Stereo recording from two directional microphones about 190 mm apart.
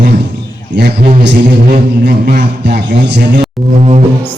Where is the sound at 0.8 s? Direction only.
55° right (ahead or behind).